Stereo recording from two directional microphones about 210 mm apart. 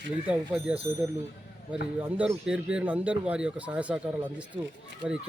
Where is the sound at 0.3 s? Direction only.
5° right (ahead or behind).